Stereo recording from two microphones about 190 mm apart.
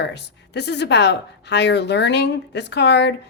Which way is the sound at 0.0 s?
65° left (ahead or behind).